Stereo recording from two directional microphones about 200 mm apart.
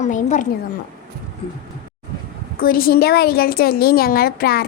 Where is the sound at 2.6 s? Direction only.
45° left (ahead or behind).